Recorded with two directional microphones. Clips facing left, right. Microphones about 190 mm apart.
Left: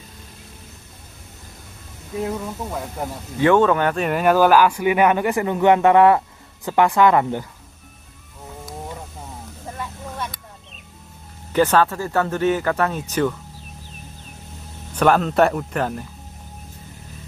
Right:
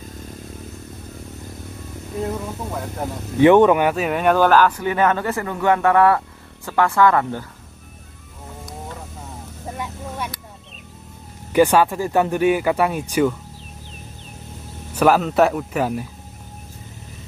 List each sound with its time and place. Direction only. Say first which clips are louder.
2.2 s speech: even; centre (ahead or behind)
3.3 s speech: right 4 dB; 20° right (ahead or behind); by 7.4 s 20° left (ahead or behind)
9.8 s a sound: right 1 dB; 10° right (ahead or behind)
11.5 s speech: right 2 dB; 10° right (ahead or behind)
15.0 s speech: right 1 dB; 5° right (ahead or behind)